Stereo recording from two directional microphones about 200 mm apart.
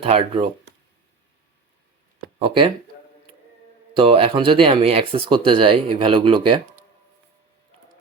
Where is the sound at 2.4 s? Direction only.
25° right (ahead or behind).